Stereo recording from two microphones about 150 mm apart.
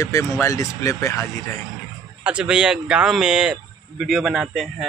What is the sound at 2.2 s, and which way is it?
Speech, 5° right (ahead or behind).